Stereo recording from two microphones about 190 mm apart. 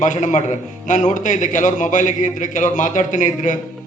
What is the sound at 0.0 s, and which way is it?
A man's voice, 40° left (ahead or behind).